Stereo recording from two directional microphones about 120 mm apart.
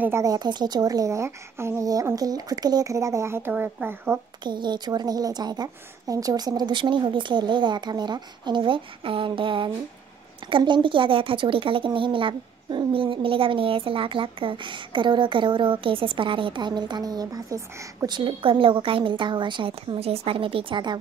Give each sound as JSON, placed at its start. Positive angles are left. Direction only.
{"t": 0.0, "sound": "a child's voice", "side_deg": -25}
{"t": 4.4, "sound": "a woman's voice", "side_deg": -40}